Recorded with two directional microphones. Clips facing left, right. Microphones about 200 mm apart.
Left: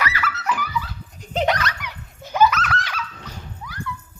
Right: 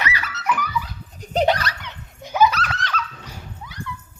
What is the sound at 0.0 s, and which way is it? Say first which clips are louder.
Dog: left 2 dB; 15° right (ahead or behind).